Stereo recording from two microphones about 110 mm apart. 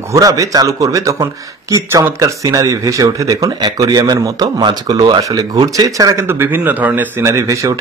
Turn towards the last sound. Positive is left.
turn(degrees=-30)  # may be behind; listen again after turning